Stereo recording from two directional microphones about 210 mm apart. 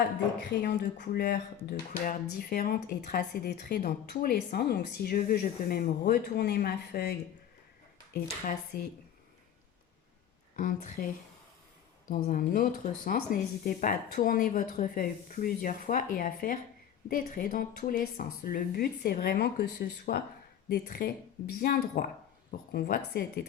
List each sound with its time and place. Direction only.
0.6 s speech: 45° left (ahead or behind)
8.7 s speech: 45° left (ahead or behind)
10.5 s speech: 40° left (ahead or behind)